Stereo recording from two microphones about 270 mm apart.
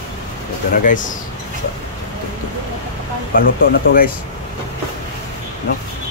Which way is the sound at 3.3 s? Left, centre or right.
Left.